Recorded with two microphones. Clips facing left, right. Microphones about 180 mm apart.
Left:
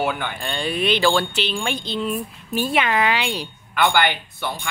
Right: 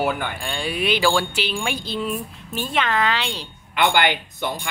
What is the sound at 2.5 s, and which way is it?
Speech, 10° left (ahead or behind).